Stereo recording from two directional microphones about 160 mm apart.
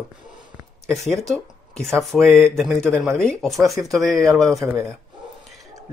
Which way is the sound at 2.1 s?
5° left (ahead or behind).